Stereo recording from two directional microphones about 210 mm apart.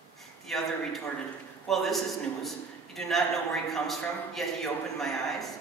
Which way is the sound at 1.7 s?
Centre (ahead or behind).